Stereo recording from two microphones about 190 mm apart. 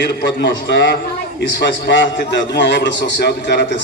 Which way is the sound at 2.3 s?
65° left (ahead or behind).